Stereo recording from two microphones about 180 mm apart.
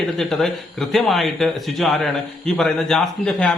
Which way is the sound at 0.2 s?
Centre (ahead or behind).